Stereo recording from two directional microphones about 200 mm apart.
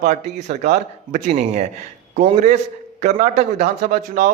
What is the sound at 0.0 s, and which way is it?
A man's voice, 35° right (ahead or behind).